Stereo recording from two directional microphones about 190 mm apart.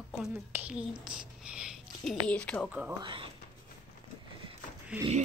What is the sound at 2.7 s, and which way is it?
Female singing, 10° right (ahead or behind).